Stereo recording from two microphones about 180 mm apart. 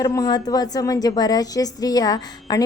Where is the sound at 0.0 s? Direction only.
20° left (ahead or behind).